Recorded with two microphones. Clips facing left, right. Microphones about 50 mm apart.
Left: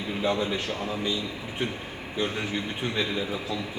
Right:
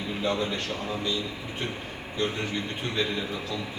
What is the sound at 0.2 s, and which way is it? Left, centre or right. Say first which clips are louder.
Speech: left 2 dB; centre.